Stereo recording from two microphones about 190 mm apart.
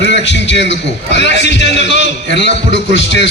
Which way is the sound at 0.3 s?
70° left (ahead or behind).